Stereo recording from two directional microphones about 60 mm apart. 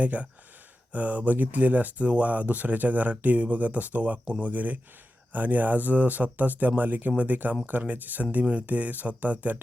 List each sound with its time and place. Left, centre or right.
0.0 s speech: right